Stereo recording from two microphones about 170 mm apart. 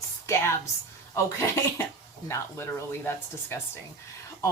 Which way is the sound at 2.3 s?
15° left (ahead or behind).